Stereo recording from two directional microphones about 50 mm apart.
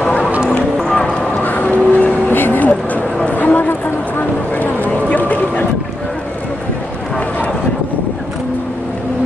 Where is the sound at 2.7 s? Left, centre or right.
Left.